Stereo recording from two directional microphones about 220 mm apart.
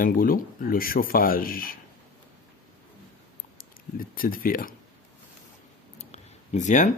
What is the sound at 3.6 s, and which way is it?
Speech, 40° left (ahead or behind).